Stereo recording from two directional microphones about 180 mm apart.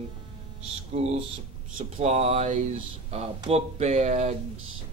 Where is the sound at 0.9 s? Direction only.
35° right (ahead or behind).